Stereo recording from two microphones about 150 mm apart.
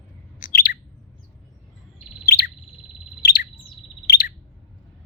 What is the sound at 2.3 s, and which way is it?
Bird, 90° left.